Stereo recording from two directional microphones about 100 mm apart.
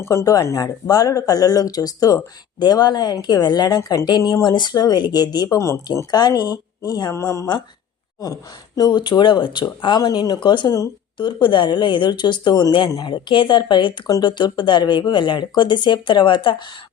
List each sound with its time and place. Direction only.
0.0 s speech: 30° left (ahead or behind)
5.5 s speech: 30° left (ahead or behind)
6.1 s speech: 40° left (ahead or behind)